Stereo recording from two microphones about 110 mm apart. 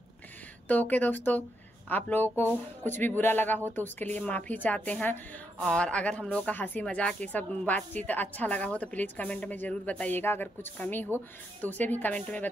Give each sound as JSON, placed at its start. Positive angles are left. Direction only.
{"t": 0.7, "sound": "speech", "side_deg": 15}